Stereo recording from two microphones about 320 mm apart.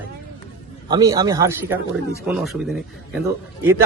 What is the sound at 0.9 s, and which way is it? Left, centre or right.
A man's voice, centre.